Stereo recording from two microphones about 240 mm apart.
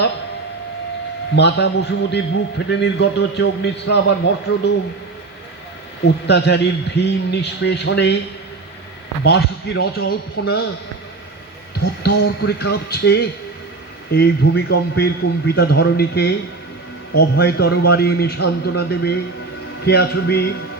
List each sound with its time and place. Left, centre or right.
1.4 s a man's voice: left
6.1 s a man's voice: left
9.2 s a man's voice: left
12.0 s a man's voice: left